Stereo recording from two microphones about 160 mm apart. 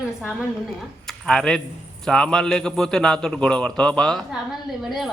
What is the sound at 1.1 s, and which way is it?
A man's voice, 5° left (ahead or behind).